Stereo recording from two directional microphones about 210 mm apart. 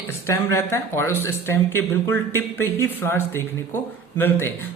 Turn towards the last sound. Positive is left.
turn(degrees=10)  # may be behind; listen again after turning